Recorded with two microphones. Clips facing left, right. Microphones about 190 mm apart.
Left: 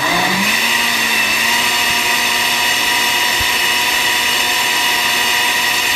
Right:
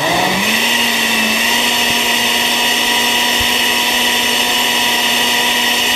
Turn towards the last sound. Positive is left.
turn(degrees=-25)  # may be behind; listen again after turning